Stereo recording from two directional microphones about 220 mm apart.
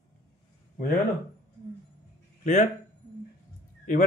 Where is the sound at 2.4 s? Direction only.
35° left (ahead or behind).